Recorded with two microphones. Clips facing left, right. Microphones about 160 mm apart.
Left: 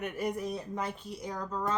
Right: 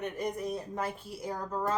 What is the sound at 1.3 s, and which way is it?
Speech, 35° right (ahead or behind).